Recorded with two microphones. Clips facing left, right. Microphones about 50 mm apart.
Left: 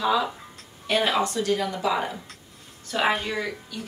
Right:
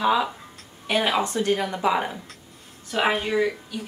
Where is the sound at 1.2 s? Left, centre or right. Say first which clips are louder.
Right 1 dB; right.